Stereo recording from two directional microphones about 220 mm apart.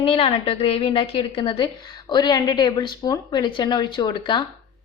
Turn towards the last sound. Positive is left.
turn(degrees=20)  # may be behind; listen again after turning